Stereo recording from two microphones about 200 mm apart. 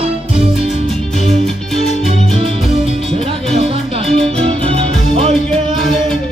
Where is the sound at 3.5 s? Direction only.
30° right (ahead or behind).